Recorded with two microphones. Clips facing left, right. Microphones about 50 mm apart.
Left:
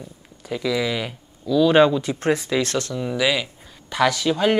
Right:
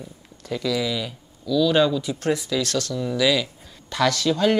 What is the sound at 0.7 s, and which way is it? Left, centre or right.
Speech, left.